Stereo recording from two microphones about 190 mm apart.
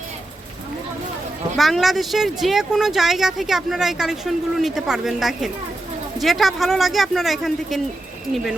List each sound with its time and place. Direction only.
1.5 s speech: centre (ahead or behind)